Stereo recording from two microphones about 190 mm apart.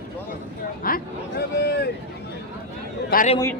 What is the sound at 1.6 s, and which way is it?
Speech, 60° left (ahead or behind).